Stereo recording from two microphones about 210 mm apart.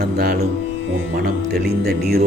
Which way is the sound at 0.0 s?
50° right (ahead or behind).